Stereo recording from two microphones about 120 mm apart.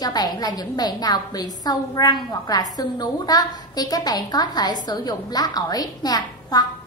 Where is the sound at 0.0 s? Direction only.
35° left (ahead or behind).